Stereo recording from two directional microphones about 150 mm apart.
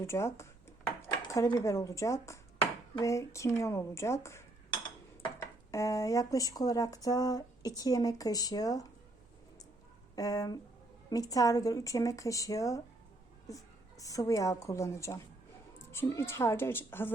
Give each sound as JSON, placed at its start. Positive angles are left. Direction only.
{"t": 0.0, "sound": "speech", "side_deg": 15}
{"t": 5.7, "sound": "speech", "side_deg": 20}
{"t": 10.2, "sound": "speech", "side_deg": 25}
{"t": 14.0, "sound": "speech", "side_deg": 25}